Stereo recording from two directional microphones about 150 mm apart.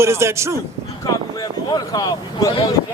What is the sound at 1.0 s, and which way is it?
Speech, 25° left (ahead or behind).